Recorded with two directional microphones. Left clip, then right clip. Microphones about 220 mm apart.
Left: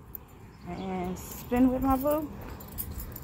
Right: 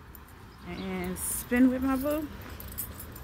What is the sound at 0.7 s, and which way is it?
Speech, 20° right (ahead or behind).